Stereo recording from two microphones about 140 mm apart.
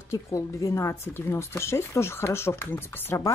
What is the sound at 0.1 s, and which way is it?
Speech, 20° left (ahead or behind).